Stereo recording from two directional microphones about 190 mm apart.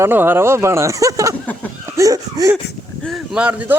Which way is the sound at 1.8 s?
15° right (ahead or behind).